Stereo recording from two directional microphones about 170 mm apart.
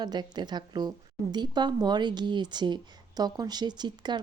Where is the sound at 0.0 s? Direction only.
25° right (ahead or behind).